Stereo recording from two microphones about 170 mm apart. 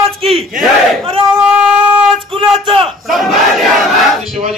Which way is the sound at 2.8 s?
Centre (ahead or behind).